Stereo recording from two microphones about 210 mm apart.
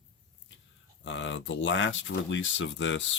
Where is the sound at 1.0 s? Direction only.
60° left (ahead or behind).